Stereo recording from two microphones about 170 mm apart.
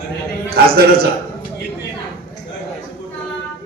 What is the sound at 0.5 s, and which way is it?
Speech, 65° right (ahead or behind).